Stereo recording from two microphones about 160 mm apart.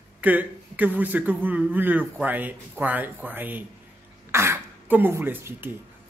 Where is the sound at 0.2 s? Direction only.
10° right (ahead or behind).